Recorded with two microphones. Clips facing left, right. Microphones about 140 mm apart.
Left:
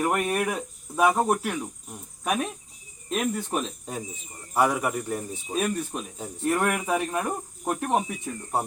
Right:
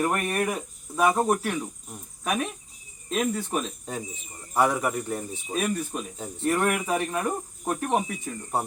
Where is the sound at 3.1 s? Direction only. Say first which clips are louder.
Even; 10° left (ahead or behind).